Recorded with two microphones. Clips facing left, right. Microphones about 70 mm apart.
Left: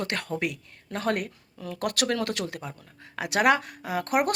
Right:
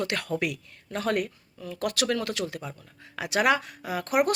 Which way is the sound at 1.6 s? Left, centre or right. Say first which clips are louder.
Even; left.